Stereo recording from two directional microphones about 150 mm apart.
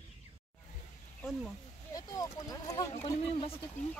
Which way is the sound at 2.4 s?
25° left (ahead or behind).